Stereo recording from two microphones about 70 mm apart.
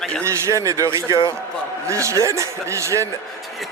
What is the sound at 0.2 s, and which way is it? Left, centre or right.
A man's voice, right.